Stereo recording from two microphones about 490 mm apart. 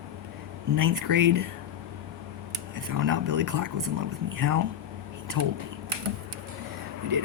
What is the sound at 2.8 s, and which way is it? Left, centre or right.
Speech, right.